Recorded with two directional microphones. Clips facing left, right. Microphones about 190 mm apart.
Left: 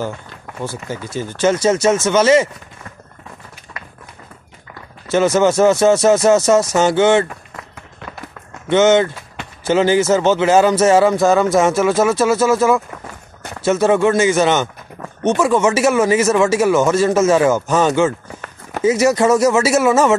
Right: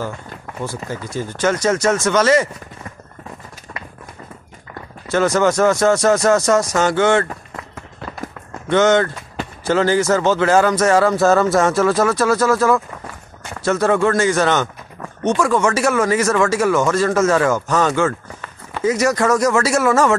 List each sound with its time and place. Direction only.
0.6 s speech: 25° left (ahead or behind)
3.7 s a sound: 50° right (ahead or behind)
5.4 s speech: 25° left (ahead or behind)
8.6 s speech: 20° left (ahead or behind)